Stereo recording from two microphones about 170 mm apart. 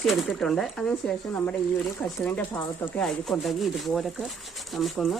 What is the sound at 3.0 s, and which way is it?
Speech, centre (ahead or behind).